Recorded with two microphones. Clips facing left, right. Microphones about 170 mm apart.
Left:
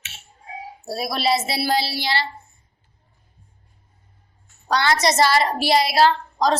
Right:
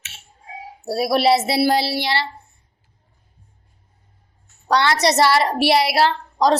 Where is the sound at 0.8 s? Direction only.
65° right (ahead or behind).